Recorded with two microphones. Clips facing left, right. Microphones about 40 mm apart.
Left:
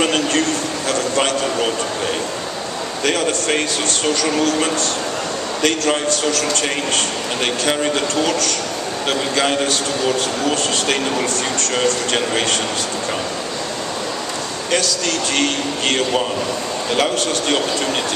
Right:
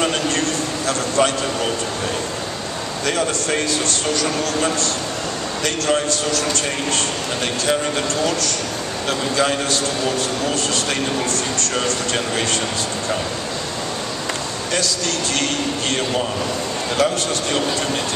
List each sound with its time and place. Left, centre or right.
3.1 s a man's voice: left
5.9 s speech: left
9.3 s speech: left
11.1 s speech: left
16.9 s a man's voice: left